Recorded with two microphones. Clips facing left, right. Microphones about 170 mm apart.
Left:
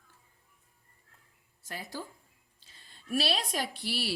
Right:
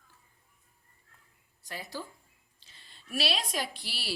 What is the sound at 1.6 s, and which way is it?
A woman's voice, 50° left (ahead or behind).